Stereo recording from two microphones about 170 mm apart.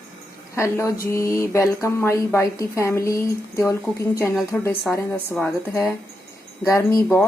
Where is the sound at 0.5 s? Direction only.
15° left (ahead or behind).